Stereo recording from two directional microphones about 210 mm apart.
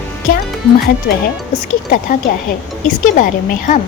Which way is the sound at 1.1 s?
50° left (ahead or behind).